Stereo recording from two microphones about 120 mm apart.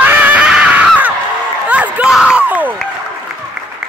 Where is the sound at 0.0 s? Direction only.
15° right (ahead or behind).